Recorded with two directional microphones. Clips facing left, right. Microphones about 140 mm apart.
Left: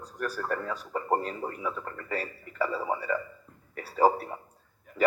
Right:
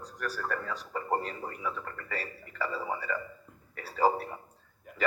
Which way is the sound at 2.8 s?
30° left (ahead or behind).